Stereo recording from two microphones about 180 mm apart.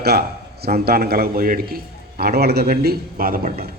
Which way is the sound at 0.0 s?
60° right (ahead or behind).